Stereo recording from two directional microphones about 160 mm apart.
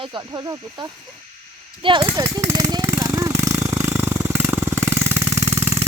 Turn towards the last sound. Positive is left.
turn(degrees=-15)  # may be behind; listen again after turning